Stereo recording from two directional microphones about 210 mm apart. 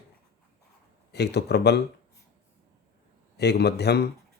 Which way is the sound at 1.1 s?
50° left (ahead or behind).